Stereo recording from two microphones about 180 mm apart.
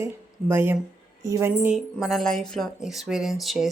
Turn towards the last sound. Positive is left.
turn(degrees=0)  # may be behind; listen again after turning